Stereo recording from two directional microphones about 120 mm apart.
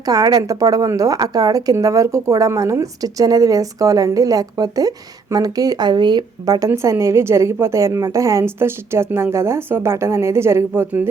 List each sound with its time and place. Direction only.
0.1 s a woman's voice: 30° right (ahead or behind)